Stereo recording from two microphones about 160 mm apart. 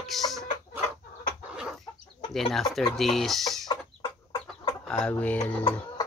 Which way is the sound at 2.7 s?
Centre (ahead or behind).